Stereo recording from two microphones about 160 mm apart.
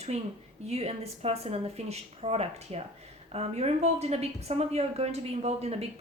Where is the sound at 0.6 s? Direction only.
40° right (ahead or behind).